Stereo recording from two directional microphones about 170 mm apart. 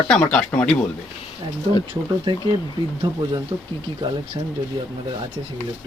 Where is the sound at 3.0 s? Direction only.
25° right (ahead or behind).